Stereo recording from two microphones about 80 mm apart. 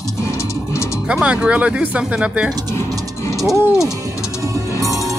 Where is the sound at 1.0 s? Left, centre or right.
Centre.